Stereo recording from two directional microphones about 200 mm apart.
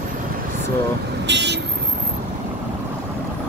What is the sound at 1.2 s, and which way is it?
Vehicle, 60° right (ahead or behind).